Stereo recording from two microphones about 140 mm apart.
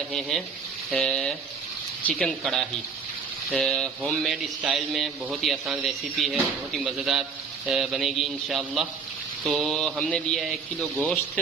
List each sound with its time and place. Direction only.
0.1 s a man's voice: 5° left (ahead or behind)